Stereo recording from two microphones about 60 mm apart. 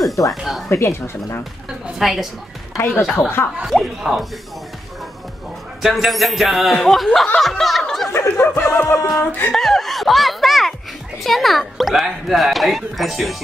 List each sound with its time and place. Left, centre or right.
0.4 s speech: centre
0.7 s speech: left
2.0 s speech: centre
3.2 s speech: left
3.6 s speech: centre
5.8 s speech: centre
7.3 s snicker: centre
8.1 s snicker: left
9.2 s speech: left
9.5 s speech: centre